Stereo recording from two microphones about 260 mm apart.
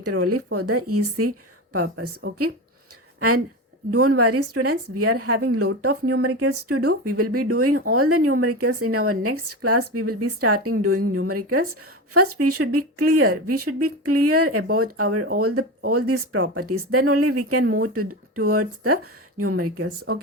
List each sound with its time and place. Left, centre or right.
0.0 s speech: right
3.2 s a woman's voice: right